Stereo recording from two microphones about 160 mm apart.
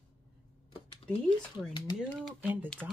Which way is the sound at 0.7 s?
35° left (ahead or behind).